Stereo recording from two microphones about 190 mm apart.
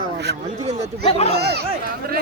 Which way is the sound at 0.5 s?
35° right (ahead or behind).